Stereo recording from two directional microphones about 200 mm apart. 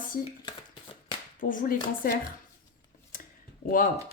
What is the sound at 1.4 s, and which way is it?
Speech, 40° left (ahead or behind).